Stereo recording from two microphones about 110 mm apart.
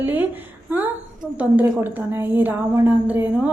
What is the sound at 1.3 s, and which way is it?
A woman's voice, 15° right (ahead or behind).